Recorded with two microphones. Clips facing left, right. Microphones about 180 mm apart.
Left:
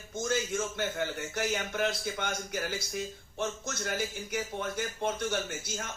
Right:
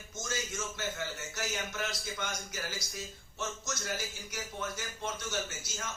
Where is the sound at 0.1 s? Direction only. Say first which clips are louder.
Left 8 dB; 55° left (ahead or behind).